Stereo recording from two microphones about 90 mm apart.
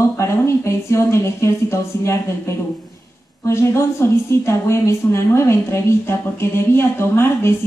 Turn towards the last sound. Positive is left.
turn(degrees=25)  # may be behind; listen again after turning